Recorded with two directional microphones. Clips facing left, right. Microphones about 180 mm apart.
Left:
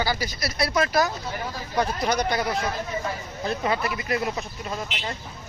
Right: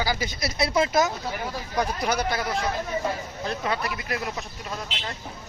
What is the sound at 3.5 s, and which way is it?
Speech, centre (ahead or behind).